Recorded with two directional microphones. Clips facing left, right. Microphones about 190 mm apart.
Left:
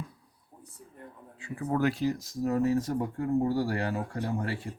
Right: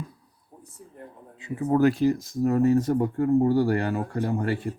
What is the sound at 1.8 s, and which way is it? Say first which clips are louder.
Speech: right 7 dB; 50° right (ahead or behind).